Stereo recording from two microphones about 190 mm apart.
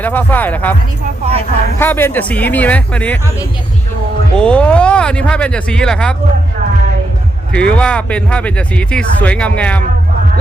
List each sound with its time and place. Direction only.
0.0 s speech: 10° left (ahead or behind)
1.2 s a sound: 30° right (ahead or behind)
1.8 s speech: 10° left (ahead or behind)
4.4 s speech: 5° left (ahead or behind)
7.5 s speech: 5° left (ahead or behind)